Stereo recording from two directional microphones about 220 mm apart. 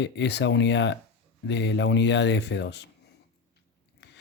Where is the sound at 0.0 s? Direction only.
50° left (ahead or behind).